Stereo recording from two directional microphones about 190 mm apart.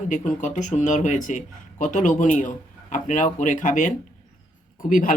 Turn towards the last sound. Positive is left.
turn(degrees=45)  # may be behind; listen again after turning